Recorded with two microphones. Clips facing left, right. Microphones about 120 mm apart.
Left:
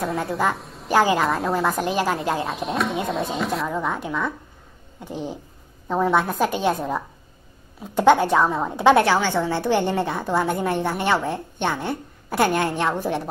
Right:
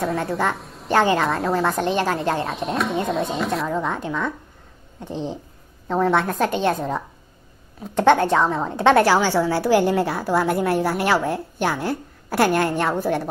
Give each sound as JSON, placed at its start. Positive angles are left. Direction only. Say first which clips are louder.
{"t": 0.0, "sound": "a woman's voice", "louder": "right 1 dB", "side_deg": 0}
{"t": 5.1, "sound": "speech", "louder": "right 2 dB", "side_deg": -25}
{"t": 5.9, "sound": "a woman's voice", "louder": "right 1 dB", "side_deg": 15}
{"t": 9.0, "sound": "a woman's voice", "louder": "right 3 dB", "side_deg": -10}